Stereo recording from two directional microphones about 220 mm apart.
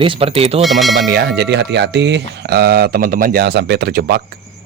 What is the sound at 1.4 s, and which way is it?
Speech, 50° right (ahead or behind).